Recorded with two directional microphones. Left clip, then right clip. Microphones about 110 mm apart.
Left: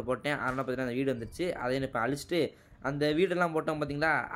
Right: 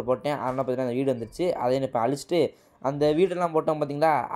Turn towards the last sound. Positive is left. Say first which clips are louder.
# right 6 dB
turn(degrees=-20)  # may be behind; listen again after turning